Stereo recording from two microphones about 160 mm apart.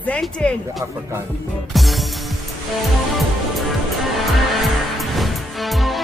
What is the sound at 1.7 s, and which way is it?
Music, centre (ahead or behind).